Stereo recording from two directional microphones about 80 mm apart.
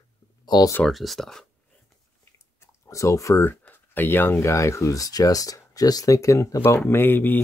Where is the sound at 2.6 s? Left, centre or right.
Left.